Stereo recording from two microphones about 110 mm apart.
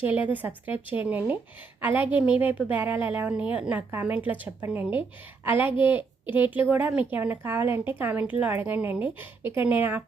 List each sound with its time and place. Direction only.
0.0 s a woman's voice: 15° right (ahead or behind)